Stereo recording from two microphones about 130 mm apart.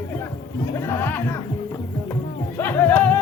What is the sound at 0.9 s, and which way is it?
Music, 15° left (ahead or behind).